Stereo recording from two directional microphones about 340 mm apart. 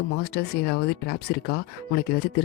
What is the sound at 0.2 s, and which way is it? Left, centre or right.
Speech, left.